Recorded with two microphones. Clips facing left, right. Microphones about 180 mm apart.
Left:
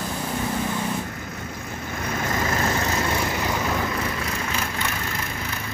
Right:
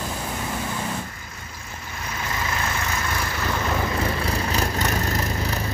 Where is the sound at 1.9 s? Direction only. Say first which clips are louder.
Left 4 dB; 50° left (ahead or behind).